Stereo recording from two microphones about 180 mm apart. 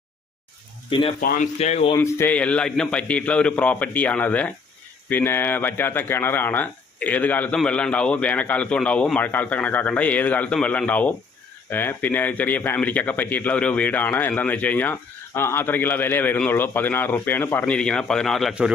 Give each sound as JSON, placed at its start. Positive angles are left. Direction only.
{"t": 0.9, "sound": "speech", "side_deg": 30}
{"t": 1.2, "sound": "speech", "side_deg": 55}
{"t": 1.5, "sound": "speech", "side_deg": 35}
{"t": 2.0, "sound": "a man's voice", "side_deg": 15}